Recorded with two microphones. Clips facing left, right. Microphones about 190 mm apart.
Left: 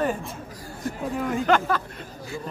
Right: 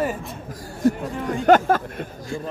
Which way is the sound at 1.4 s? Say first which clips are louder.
Right 8 dB; 45° right (ahead or behind).